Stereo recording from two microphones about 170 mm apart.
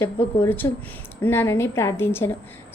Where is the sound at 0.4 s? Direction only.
10° left (ahead or behind).